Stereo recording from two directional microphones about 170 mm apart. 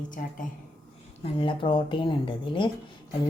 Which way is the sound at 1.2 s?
30° left (ahead or behind).